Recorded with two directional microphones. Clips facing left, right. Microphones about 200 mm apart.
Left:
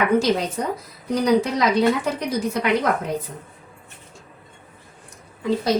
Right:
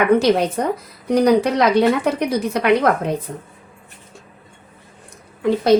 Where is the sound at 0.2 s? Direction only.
65° right (ahead or behind).